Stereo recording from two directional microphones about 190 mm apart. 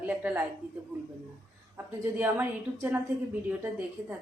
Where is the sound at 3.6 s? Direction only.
10° right (ahead or behind).